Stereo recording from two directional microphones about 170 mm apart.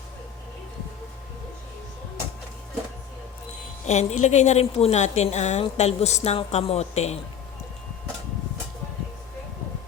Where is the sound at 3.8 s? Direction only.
40° left (ahead or behind).